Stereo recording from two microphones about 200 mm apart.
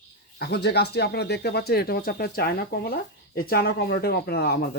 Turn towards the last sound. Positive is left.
turn(degrees=55)  # may be behind; listen again after turning